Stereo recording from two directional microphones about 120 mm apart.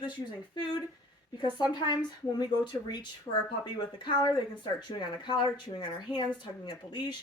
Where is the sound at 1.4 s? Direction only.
40° left (ahead or behind).